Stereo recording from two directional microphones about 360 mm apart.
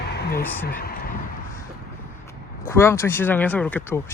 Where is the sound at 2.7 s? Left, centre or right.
Centre.